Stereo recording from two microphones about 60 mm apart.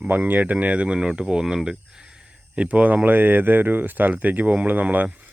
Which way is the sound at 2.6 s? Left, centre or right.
Right.